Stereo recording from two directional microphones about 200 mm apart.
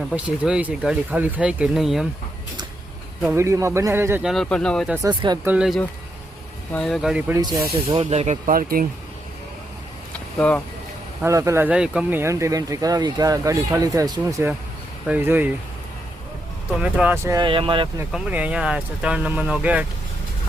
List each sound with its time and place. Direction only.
0.1 s speech: 5° right (ahead or behind)
3.2 s speech: 15° right (ahead or behind)
4.3 s speech: 5° left (ahead or behind)
5.0 s speech: 20° right (ahead or behind)
5.5 s speech: 5° right (ahead or behind)
7.4 s speech: 20° right (ahead or behind)
7.9 s speech: 35° right (ahead or behind)
10.1 s vehicle: 5° left (ahead or behind)
11.2 s speech: 15° right (ahead or behind)
16.8 s speech: 5° right (ahead or behind)
17.3 s speech: 25° right (ahead or behind)
18.1 s speech: 5° right (ahead or behind)